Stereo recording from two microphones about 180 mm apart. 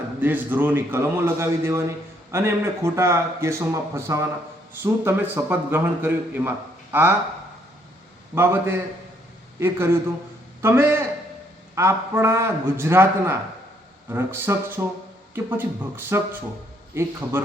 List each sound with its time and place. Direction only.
0.2 s a man's voice: 10° right (ahead or behind)
8.4 s a man's voice: 10° right (ahead or behind)